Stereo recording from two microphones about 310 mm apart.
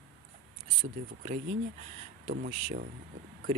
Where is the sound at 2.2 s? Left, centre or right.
Right.